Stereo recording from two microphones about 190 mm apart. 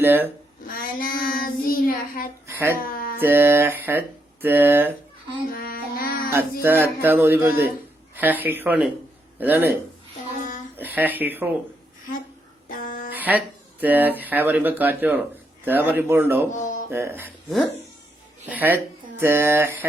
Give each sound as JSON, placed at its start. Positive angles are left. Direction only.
{"t": 0.0, "sound": "speech", "side_deg": -10}
{"t": 0.7, "sound": "child singing", "side_deg": 50}
{"t": 2.5, "sound": "a sound", "side_deg": -15}
{"t": 2.9, "sound": "mantra", "side_deg": 50}
{"t": 3.2, "sound": "speech", "side_deg": -10}
{"t": 5.5, "sound": "child singing", "side_deg": 50}
{"t": 6.6, "sound": "speech", "side_deg": -10}
{"t": 10.8, "sound": "speech", "side_deg": -10}
{"t": 12.6, "sound": "a sound", "side_deg": 45}
{"t": 13.1, "sound": "speech", "side_deg": -10}
{"t": 16.5, "sound": "a sound", "side_deg": 40}
{"t": 16.9, "sound": "speech", "side_deg": -10}
{"t": 18.4, "sound": "speech", "side_deg": -10}